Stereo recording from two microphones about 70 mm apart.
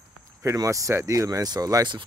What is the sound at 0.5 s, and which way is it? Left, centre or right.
Speech, right.